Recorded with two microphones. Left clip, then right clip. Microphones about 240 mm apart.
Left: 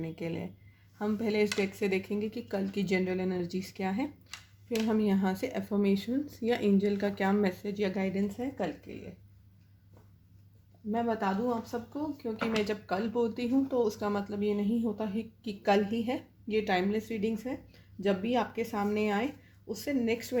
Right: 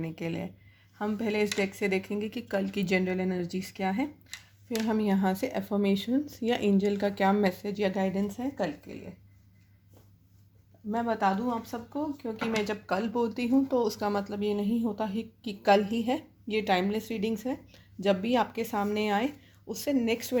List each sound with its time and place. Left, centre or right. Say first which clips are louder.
0.0 s speech: right 2 dB; right
10.9 s speech: right 3 dB; right